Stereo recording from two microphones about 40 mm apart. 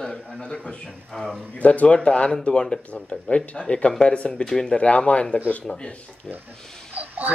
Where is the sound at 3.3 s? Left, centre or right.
Left.